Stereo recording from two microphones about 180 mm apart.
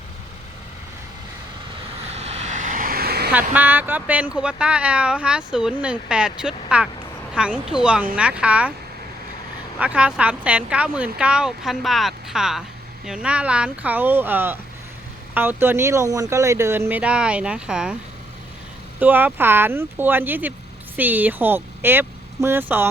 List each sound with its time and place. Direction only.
2.1 s vehicle: 35° right (ahead or behind); by 3.3 s 60° right (ahead or behind)
3.5 s speech: 10° right (ahead or behind)
9.7 s speech: 5° right (ahead or behind)
18.9 s speech: 10° right (ahead or behind)